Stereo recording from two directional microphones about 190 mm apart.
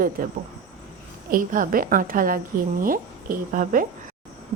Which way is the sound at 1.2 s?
45° right (ahead or behind).